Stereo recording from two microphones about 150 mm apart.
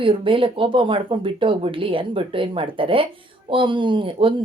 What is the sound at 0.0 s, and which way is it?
Speech, 35° right (ahead or behind).